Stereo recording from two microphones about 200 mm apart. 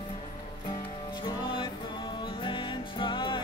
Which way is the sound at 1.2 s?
25° left (ahead or behind).